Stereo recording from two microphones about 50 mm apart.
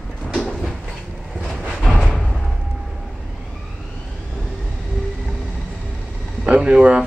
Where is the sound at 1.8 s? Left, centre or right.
Centre.